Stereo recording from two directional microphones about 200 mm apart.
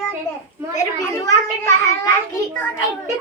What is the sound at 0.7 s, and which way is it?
A child's voice, 15° left (ahead or behind).